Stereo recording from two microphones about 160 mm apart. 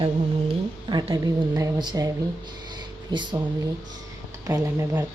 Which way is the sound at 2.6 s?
25° right (ahead or behind).